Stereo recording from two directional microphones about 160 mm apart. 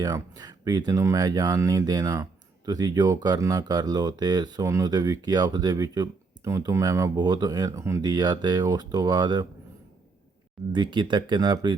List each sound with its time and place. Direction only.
0.0 s speech: 25° right (ahead or behind)
10.7 s speech: 30° right (ahead or behind)